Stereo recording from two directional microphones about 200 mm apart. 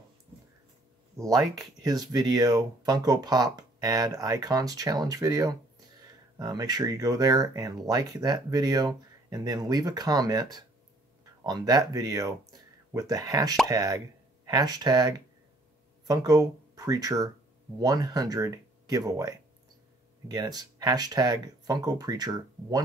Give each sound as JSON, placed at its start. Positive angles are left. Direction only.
{"t": 1.1, "sound": "speech", "side_deg": -15}